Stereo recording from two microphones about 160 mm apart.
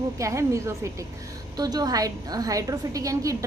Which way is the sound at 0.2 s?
20° right (ahead or behind).